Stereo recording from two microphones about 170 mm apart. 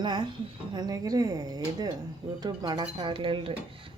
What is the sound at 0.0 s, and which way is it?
Speech, 25° right (ahead or behind).